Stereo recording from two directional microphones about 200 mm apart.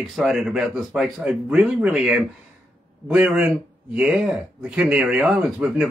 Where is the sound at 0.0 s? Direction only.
Centre (ahead or behind).